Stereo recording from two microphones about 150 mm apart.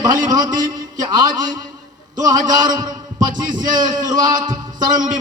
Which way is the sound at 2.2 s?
25° right (ahead or behind).